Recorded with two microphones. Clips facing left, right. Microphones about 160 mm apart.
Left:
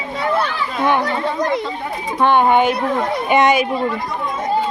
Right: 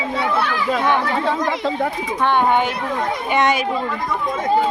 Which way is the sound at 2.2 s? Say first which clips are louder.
Left 4 dB; 15° left (ahead or behind).